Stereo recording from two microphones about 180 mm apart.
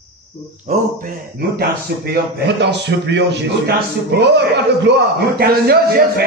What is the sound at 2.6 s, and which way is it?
A man's voice, 75° right (ahead or behind).